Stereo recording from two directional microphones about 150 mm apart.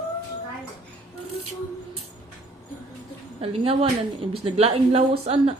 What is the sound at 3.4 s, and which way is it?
Speech, 40° right (ahead or behind).